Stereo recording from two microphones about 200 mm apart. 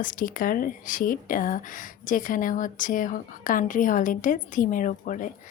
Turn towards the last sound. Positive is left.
turn(degrees=40)  # may be behind; listen again after turning